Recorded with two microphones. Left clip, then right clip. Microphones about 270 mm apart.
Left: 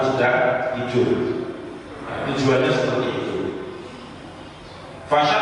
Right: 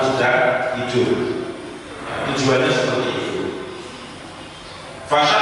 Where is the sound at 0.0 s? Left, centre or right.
Centre.